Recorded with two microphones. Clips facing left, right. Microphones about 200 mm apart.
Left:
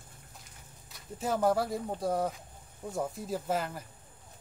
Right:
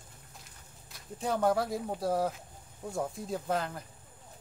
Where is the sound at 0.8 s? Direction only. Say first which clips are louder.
Even; centre (ahead or behind).